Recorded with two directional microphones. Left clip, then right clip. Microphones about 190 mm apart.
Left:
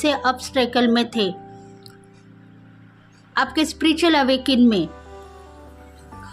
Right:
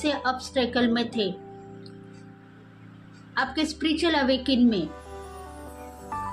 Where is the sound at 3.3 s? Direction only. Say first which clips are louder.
Left 6 dB; 35° left (ahead or behind).